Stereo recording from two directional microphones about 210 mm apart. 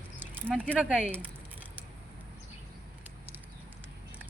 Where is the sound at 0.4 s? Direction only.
5° left (ahead or behind).